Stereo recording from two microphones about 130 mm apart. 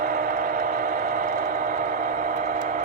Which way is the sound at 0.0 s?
90° right.